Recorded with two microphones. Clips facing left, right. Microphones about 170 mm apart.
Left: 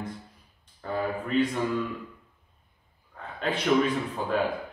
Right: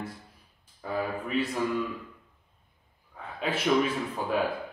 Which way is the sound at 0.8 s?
5° right (ahead or behind).